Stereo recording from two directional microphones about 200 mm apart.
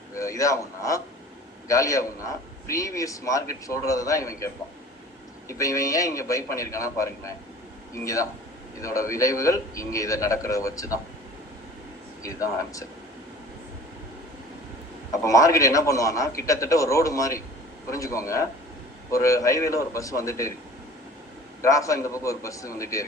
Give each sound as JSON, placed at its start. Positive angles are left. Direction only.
{"t": 0.2, "sound": "a man's voice", "side_deg": 15}
{"t": 5.5, "sound": "a man's voice", "side_deg": 15}
{"t": 7.9, "sound": "a man's voice", "side_deg": 15}
{"t": 12.2, "sound": "a man's voice", "side_deg": 15}
{"t": 15.1, "sound": "a man's voice", "side_deg": 15}
{"t": 21.6, "sound": "a man's voice", "side_deg": 15}